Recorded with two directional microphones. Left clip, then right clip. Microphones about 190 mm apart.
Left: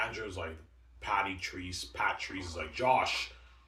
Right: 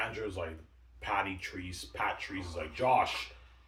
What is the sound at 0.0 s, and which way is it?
Speech, 20° right (ahead or behind).